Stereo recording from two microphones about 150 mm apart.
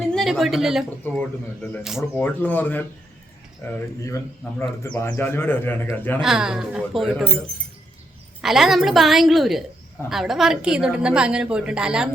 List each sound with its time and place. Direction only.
0.1 s a woman's voice: centre (ahead or behind)
2.1 s a man's voice: 10° left (ahead or behind)
6.1 s a woman's voice: 5° right (ahead or behind)
8.4 s a woman's voice: 5° right (ahead or behind)